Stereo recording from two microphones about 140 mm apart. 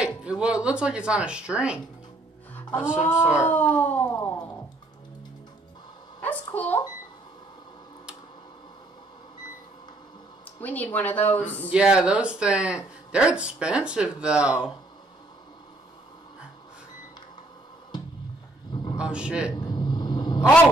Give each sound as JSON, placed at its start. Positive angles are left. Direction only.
{"t": 0.0, "sound": "speech", "side_deg": -5}
{"t": 3.0, "sound": "speech", "side_deg": 15}
{"t": 6.2, "sound": "speech", "side_deg": 10}
{"t": 10.4, "sound": "speech", "side_deg": 10}
{"t": 11.7, "sound": "speech", "side_deg": -5}
{"t": 18.9, "sound": "speech", "side_deg": -5}
{"t": 19.5, "sound": "rumble", "side_deg": 30}